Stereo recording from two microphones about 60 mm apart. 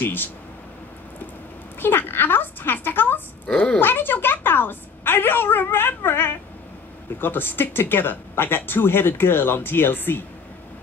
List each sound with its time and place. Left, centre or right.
0.0 s speech: left
1.8 s a sound: left
3.4 s speech: centre
3.8 s a woman's voice: left